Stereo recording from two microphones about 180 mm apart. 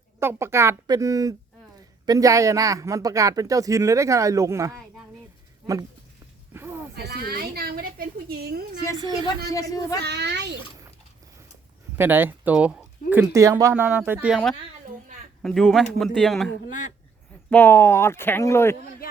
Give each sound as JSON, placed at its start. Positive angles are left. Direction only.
{"t": 0.2, "sound": "speech", "side_deg": -15}
{"t": 6.5, "sound": "a sound", "side_deg": -10}
{"t": 6.9, "sound": "a woman's voice", "side_deg": -60}
{"t": 9.5, "sound": "speech", "side_deg": 20}
{"t": 10.0, "sound": "a child's voice", "side_deg": -70}
{"t": 11.9, "sound": "speech", "side_deg": -10}
{"t": 15.4, "sound": "speech", "side_deg": 0}
{"t": 17.5, "sound": "speech", "side_deg": 10}